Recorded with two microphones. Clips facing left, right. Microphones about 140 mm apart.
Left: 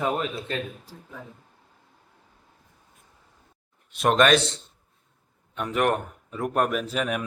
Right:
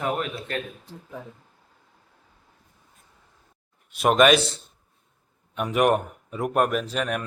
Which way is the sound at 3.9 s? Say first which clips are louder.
Right 2 dB; 5° right (ahead or behind).